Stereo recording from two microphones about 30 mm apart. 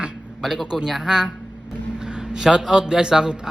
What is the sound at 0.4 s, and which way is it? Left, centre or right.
Speech, centre.